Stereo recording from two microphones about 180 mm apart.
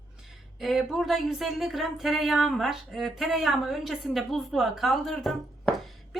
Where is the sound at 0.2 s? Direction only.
Centre (ahead or behind).